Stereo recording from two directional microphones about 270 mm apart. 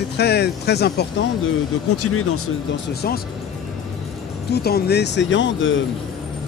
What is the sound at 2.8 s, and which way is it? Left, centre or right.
Speech, left.